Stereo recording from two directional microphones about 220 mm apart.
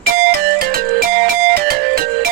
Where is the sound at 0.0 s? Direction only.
45° right (ahead or behind).